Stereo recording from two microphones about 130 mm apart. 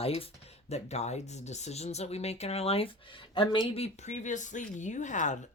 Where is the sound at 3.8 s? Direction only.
65° left (ahead or behind).